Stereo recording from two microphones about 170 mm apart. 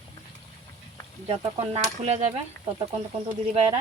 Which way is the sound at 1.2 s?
35° right (ahead or behind).